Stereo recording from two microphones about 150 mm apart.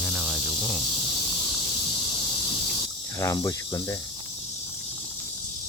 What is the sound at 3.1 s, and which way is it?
Cricket, 20° left (ahead or behind).